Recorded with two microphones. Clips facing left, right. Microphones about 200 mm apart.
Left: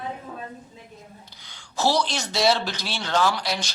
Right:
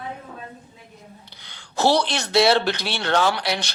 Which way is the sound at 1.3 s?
65° right (ahead or behind).